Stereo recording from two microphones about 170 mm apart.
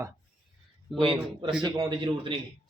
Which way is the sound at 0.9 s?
30° right (ahead or behind).